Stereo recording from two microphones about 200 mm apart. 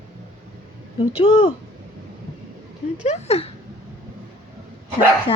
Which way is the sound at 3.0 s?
35° left (ahead or behind).